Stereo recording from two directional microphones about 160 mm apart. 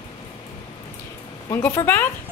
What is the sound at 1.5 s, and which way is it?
Speech, 15° left (ahead or behind).